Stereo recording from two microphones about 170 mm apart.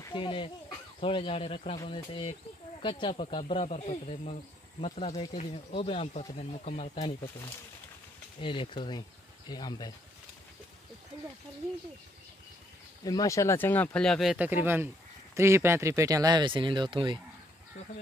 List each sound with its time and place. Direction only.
0.0 s speech: 30° left (ahead or behind)
8.4 s speech: 30° left (ahead or behind)
13.0 s speech: 20° left (ahead or behind); by 17.2 s 30° right (ahead or behind)